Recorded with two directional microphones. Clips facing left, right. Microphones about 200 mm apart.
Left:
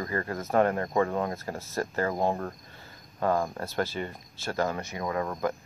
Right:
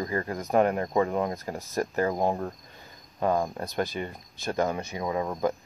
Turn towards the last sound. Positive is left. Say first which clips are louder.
# right 2 dB
turn(degrees=-15)  # may be behind; listen again after turning